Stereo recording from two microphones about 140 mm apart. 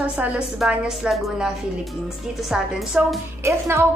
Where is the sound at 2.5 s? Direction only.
Centre (ahead or behind).